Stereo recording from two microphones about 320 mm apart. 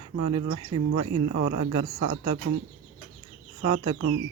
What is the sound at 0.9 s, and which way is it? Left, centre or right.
Speech, right.